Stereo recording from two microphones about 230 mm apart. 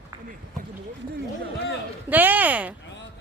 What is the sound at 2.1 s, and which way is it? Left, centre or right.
Speech, centre.